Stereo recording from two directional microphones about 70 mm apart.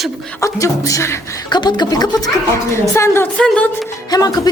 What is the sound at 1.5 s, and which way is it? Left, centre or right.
Speech, left.